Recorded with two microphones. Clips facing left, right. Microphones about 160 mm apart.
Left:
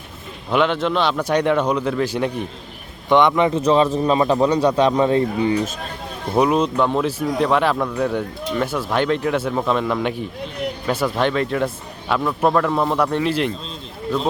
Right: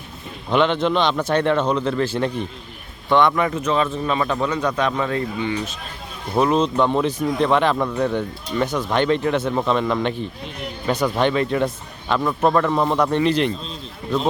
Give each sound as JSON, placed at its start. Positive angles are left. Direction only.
{"t": 0.5, "sound": "a man's voice", "side_deg": 5}
{"t": 3.6, "sound": "a man's voice", "side_deg": 35}
{"t": 6.3, "sound": "speech", "side_deg": 10}